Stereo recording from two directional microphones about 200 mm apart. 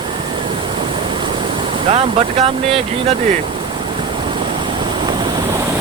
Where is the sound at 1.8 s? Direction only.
30° right (ahead or behind).